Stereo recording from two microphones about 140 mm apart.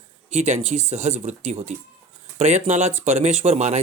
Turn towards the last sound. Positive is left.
turn(degrees=-50)  # may be behind; listen again after turning